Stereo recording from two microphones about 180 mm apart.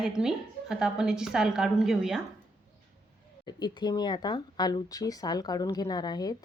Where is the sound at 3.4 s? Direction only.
25° left (ahead or behind).